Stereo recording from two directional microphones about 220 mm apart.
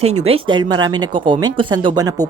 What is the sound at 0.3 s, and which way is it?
Speech, 25° right (ahead or behind).